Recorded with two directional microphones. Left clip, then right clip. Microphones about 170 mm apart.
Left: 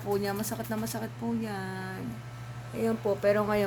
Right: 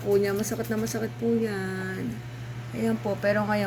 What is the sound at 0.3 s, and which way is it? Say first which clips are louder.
Speech: right 5 dB; 25° left (ahead or behind).